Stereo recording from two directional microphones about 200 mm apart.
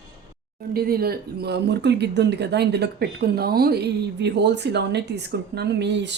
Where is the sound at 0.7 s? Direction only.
50° right (ahead or behind).